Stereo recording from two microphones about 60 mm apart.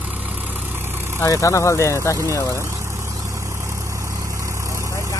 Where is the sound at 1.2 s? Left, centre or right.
Left.